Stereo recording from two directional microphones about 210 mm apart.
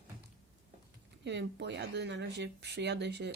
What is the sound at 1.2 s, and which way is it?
Speech, 55° right (ahead or behind).